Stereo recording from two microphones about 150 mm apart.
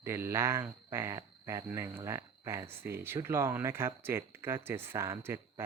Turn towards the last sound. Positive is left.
turn(degrees=-15)  # may be behind; listen again after turning